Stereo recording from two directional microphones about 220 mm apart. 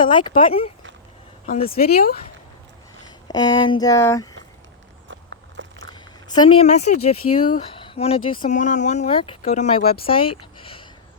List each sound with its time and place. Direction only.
0.1 s speech: 20° left (ahead or behind)
1.7 s speech: 45° left (ahead or behind)
3.2 s speech: 20° left (ahead or behind)
5.0 s biting: 55° right (ahead or behind)
6.2 s speech: 20° left (ahead or behind)